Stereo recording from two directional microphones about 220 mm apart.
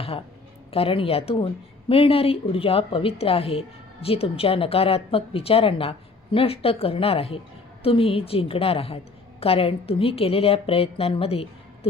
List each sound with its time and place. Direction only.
0.7 s a woman's voice: 25° left (ahead or behind)